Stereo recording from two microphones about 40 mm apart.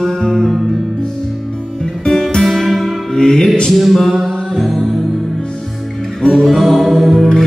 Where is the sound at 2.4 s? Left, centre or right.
Centre.